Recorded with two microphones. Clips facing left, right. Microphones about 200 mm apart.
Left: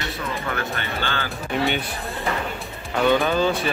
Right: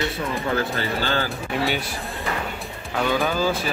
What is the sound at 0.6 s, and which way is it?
Speech, 35° right (ahead or behind).